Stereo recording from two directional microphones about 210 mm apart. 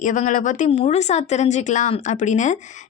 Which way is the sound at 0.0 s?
40° left (ahead or behind).